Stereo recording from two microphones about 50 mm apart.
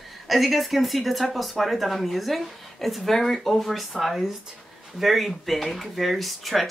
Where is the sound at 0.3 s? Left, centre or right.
Centre.